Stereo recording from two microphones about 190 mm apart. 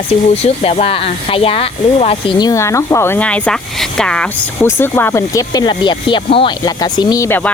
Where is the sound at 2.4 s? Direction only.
15° left (ahead or behind).